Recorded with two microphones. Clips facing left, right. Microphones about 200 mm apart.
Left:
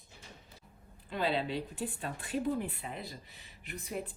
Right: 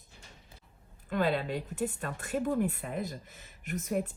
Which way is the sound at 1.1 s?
50° right (ahead or behind).